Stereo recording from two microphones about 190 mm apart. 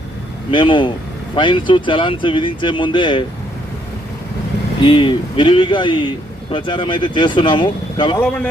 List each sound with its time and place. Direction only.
0.5 s speech: 25° left (ahead or behind)
4.8 s speech: 25° left (ahead or behind)
8.2 s speech: 10° left (ahead or behind)